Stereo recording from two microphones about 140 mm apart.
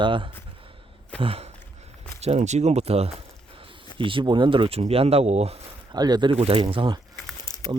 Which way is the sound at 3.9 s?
35° right (ahead or behind).